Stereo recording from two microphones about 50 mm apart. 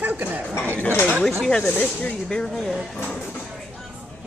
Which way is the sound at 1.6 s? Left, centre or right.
Left.